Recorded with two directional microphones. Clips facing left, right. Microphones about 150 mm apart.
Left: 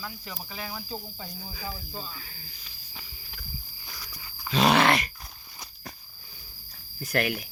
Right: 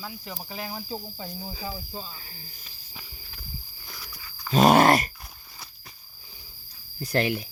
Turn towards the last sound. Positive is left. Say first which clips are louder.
# right 3 dB
turn(degrees=-25)  # may be behind; listen again after turning